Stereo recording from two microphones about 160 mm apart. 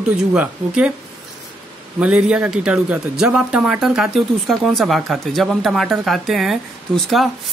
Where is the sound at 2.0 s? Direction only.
5° right (ahead or behind).